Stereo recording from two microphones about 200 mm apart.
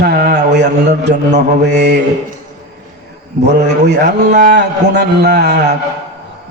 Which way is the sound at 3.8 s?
55° right (ahead or behind).